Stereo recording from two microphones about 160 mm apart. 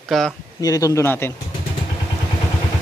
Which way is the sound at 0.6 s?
20° left (ahead or behind).